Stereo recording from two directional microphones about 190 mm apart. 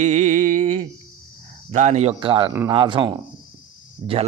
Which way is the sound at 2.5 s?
20° right (ahead or behind).